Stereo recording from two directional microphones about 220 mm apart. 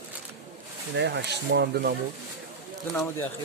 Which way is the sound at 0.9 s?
50° right (ahead or behind).